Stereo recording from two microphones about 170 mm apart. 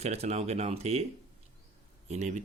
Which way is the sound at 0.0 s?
40° right (ahead or behind).